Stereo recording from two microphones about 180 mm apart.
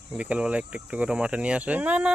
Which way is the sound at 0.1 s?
5° right (ahead or behind).